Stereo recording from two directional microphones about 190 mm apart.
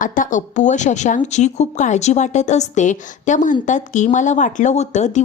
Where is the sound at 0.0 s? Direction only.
45° left (ahead or behind).